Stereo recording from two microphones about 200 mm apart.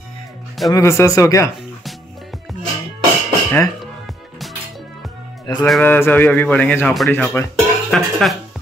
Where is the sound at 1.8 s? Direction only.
Centre (ahead or behind).